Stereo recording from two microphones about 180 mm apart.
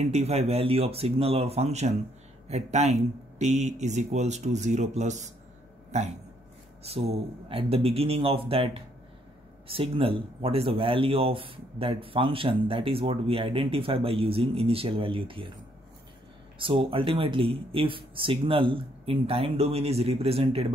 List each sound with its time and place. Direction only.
0.0 s speech: 35° right (ahead or behind)
16.5 s speech: 30° right (ahead or behind)